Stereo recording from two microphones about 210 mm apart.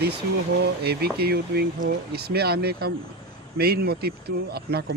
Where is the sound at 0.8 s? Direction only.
50° right (ahead or behind).